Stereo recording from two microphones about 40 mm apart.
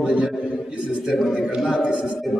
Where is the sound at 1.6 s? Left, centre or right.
Centre.